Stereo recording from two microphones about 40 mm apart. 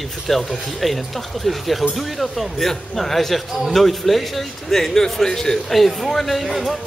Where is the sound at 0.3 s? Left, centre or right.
Centre.